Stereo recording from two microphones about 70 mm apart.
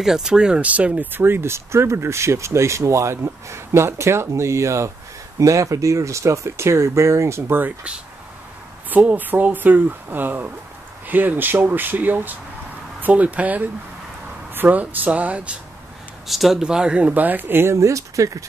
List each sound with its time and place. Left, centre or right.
0.0 s speech: centre; by 7.7 s right
8.9 s speech: right
16.3 s speech: centre
17.1 s speech: right
17.7 s speech: right